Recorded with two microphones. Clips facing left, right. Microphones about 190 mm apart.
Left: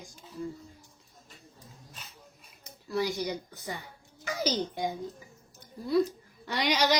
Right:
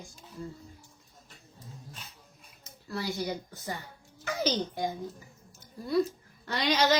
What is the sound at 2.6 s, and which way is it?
Speech, 20° left (ahead or behind).